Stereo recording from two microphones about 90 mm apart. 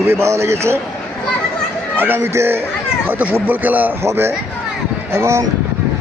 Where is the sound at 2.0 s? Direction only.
25° right (ahead or behind).